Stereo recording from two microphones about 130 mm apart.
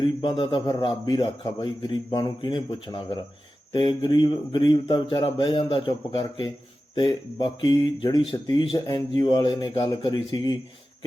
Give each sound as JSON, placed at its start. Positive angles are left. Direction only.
{"t": 0.0, "sound": "a man's voice", "side_deg": 40}